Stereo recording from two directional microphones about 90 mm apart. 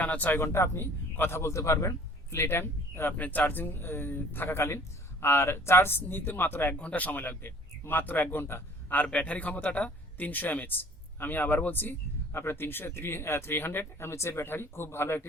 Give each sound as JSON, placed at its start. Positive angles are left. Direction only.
{"t": 0.0, "sound": "a man's voice", "side_deg": 15}